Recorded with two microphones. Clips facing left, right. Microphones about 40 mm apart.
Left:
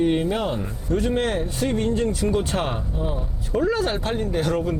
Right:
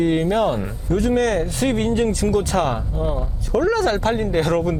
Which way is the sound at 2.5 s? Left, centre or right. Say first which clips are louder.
Right 5 dB; right.